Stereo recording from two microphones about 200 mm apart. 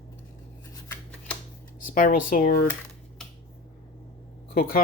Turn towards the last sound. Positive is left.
turn(degrees=45)  # may be behind; listen again after turning